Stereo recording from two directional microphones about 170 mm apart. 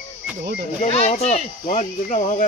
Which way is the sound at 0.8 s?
40° left (ahead or behind).